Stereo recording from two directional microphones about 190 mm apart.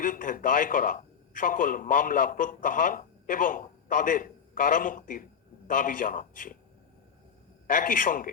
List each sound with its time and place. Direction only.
0.0 s a man's voice: 45° left (ahead or behind)
7.7 s a man's voice: 45° left (ahead or behind)